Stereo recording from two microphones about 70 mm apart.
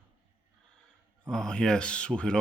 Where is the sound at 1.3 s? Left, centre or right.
Centre.